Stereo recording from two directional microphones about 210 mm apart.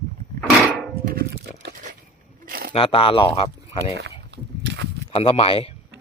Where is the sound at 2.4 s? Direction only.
45° right (ahead or behind).